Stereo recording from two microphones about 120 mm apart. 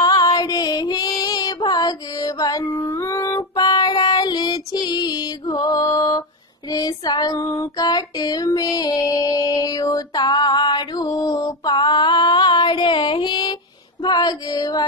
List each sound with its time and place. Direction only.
0.0 s music: 30° left (ahead or behind)
2.6 s music: 20° left (ahead or behind)
3.5 s child singing: 35° left (ahead or behind)
8.5 s music: 30° left (ahead or behind)
14.0 s female singing: 35° left (ahead or behind)